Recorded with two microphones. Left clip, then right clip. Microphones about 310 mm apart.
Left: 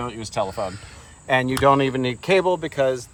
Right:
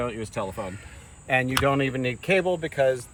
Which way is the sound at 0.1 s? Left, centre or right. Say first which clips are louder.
Left 5 dB; left.